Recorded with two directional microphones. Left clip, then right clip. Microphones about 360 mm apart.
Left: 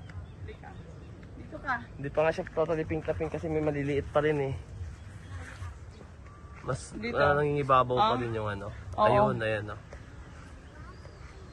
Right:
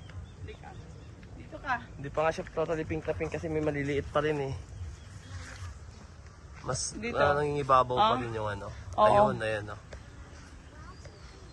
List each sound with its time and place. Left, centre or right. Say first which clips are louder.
1.8 s a man's voice: left 2 dB; centre
7.0 s a man's voice: left 1 dB; centre
7.9 s speech: even; right
8.3 s a man's voice: even; centre